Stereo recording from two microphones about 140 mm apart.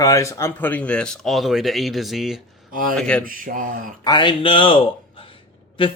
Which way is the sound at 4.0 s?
30° left (ahead or behind).